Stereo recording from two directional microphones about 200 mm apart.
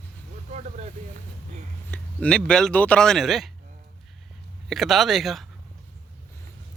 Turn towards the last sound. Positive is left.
turn(degrees=0)  # may be behind; listen again after turning